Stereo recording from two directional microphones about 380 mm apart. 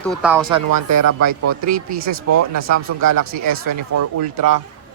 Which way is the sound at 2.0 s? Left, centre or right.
Right.